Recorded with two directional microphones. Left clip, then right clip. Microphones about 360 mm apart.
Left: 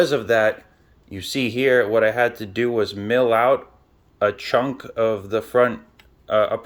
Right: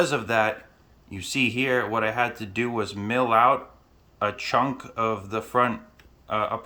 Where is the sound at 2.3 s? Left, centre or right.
Centre.